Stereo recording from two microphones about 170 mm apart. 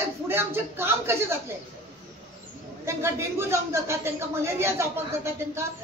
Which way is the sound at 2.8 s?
15° right (ahead or behind).